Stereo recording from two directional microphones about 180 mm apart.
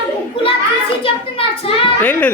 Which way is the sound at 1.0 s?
30° left (ahead or behind).